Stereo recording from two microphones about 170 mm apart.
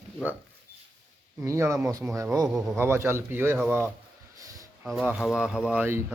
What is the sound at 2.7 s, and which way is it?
Speech, 15° right (ahead or behind).